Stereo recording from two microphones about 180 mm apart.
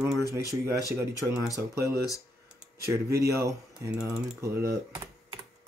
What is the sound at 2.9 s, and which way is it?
Speech, 15° right (ahead or behind).